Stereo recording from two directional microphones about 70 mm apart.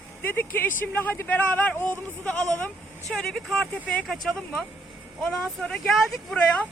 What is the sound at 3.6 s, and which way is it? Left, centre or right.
Speech, centre.